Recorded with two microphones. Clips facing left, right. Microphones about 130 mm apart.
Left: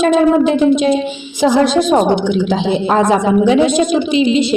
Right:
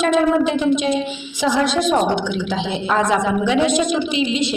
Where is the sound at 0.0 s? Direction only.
30° left (ahead or behind).